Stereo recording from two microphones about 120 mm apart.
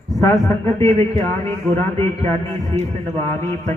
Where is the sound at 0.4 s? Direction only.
25° left (ahead or behind).